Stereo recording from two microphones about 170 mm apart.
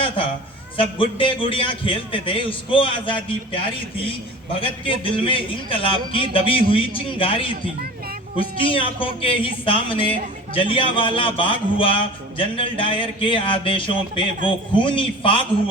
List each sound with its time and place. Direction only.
0.8 s a man's voice: 30° left (ahead or behind)
4.6 s a man's voice: 30° left (ahead or behind)